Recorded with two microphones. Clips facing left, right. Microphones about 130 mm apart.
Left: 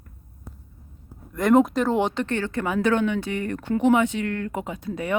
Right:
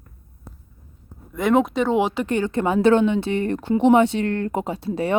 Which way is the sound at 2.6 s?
30° right (ahead or behind).